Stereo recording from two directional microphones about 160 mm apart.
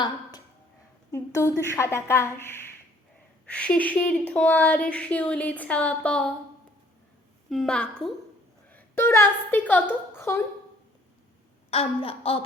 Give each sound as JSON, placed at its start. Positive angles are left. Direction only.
{"t": 1.1, "sound": "speech", "side_deg": 15}
{"t": 7.5, "sound": "a woman's voice", "side_deg": 5}
{"t": 11.7, "sound": "a sound", "side_deg": 35}